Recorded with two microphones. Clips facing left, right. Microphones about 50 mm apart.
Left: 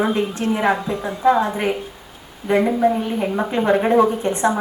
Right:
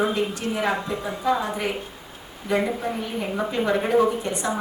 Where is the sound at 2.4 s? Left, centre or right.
Left.